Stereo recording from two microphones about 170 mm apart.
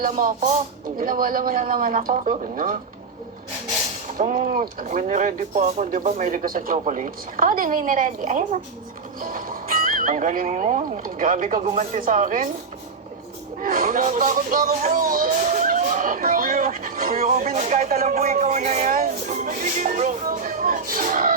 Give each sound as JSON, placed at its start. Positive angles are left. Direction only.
{"t": 0.0, "sound": "a woman's voice", "side_deg": -55}
{"t": 4.2, "sound": "a woman's voice", "side_deg": -45}
{"t": 11.6, "sound": "speech", "side_deg": -35}
{"t": 11.9, "sound": "a woman's voice", "side_deg": -50}
{"t": 13.6, "sound": "speech", "side_deg": -55}
{"t": 17.2, "sound": "a woman's voice", "side_deg": -45}